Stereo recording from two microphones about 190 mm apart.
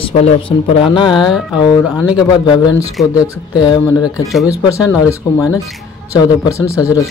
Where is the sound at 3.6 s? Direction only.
20° left (ahead or behind).